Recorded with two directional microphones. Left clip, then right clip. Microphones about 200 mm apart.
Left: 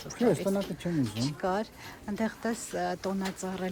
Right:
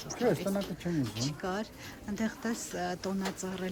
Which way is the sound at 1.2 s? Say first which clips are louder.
Left 5 dB; 10° right (ahead or behind).